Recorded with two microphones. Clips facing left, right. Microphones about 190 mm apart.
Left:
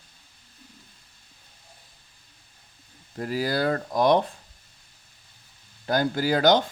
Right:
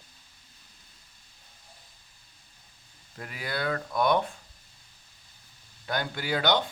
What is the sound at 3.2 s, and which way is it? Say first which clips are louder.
Speech: left 9 dB; 35° left (ahead or behind).